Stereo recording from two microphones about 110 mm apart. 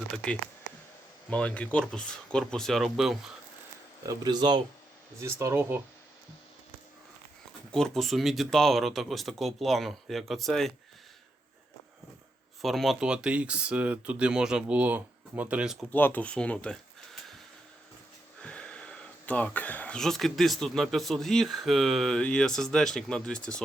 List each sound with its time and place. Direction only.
1.3 s speech: 10° left (ahead or behind)
4.0 s speech: 35° right (ahead or behind)
5.2 s speech: 25° right (ahead or behind)
7.7 s speech: 5° left (ahead or behind)
12.6 s speech: centre (ahead or behind)
15.9 s speech: 15° left (ahead or behind)
18.4 s speech: 10° left (ahead or behind)